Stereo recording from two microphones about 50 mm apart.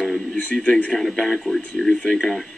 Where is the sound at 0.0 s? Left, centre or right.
Centre.